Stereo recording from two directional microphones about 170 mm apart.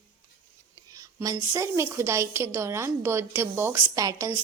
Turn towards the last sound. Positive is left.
turn(degrees=-20)  # may be behind; listen again after turning